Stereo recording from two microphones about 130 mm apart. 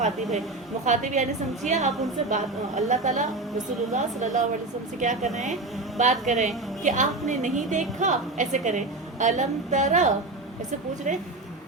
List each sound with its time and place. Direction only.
0.9 s a woman's voice: 65° right (ahead or behind)